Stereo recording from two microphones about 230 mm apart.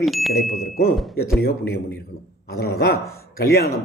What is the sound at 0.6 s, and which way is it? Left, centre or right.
A man's voice, left.